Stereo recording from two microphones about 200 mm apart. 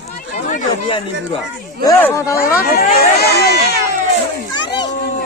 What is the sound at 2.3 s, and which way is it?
Speech, 50° left (ahead or behind).